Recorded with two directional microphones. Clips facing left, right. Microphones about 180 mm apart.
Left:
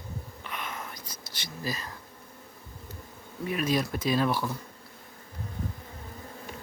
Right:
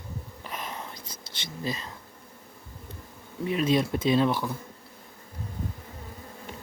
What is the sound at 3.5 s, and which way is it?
Speech, 25° right (ahead or behind).